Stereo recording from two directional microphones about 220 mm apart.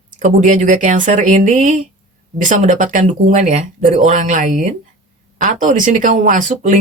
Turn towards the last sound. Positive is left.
turn(degrees=-35)  # may be behind; listen again after turning